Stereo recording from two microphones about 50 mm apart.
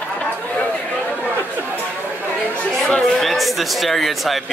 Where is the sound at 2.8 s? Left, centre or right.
Centre.